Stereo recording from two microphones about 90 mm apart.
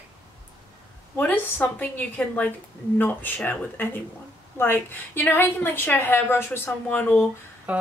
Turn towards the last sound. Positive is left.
turn(degrees=-15)  # may be behind; listen again after turning